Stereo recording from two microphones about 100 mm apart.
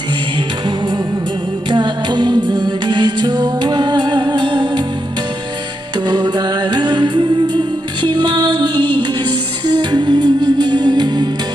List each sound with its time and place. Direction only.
1.7 s music: 50° right (ahead or behind)
6.1 s music: 45° right (ahead or behind)